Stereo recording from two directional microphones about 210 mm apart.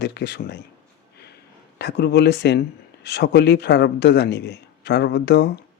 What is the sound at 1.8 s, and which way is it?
A man's voice, 50° left (ahead or behind).